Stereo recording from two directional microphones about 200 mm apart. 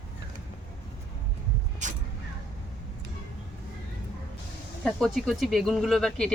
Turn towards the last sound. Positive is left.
turn(degrees=5)  # may be behind; listen again after turning